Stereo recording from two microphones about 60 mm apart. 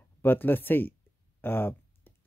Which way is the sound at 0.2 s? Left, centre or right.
Left.